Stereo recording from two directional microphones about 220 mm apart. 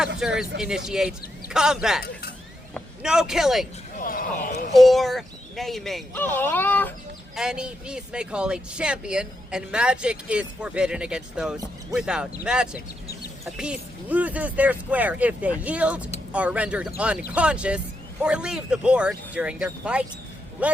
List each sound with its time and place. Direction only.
0.2 s speech: 5° right (ahead or behind)
3.9 s a sound: 40° left (ahead or behind)
4.7 s speech: centre (ahead or behind)
7.3 s speech: 5° right (ahead or behind)